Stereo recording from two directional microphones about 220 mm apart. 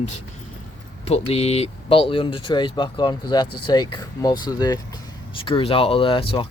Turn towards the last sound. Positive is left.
turn(degrees=25)  # may be behind; listen again after turning